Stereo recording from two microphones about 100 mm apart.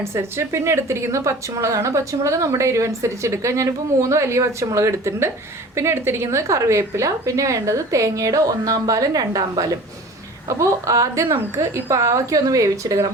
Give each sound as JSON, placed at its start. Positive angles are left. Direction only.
{"t": 0.0, "sound": "a woman's voice", "side_deg": -25}